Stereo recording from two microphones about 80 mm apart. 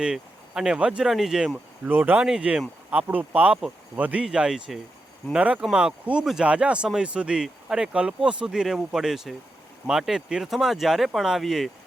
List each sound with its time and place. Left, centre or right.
0.0 s speech: centre
1.8 s a man's voice: right
2.2 s a man's voice: centre